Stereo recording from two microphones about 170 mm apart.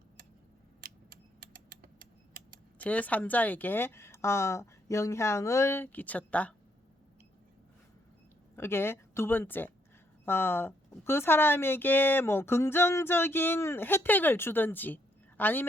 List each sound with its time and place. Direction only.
0.8 s typing: 60° right (ahead or behind)
2.7 s speech: 10° left (ahead or behind)
8.5 s speech: 15° left (ahead or behind)